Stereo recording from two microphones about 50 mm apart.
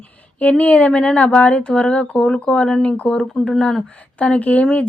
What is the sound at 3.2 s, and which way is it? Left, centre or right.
Speech, centre.